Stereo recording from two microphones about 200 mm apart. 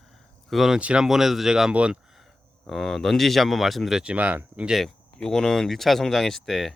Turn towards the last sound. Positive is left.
turn(degrees=0)  # may be behind; listen again after turning